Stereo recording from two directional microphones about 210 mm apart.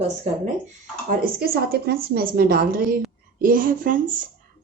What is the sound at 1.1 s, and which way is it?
A woman's voice, 45° right (ahead or behind).